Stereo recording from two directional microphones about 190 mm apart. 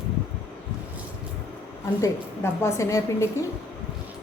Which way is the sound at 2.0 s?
15° left (ahead or behind).